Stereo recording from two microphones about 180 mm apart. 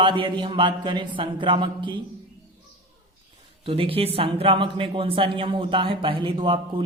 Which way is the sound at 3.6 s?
30° right (ahead or behind).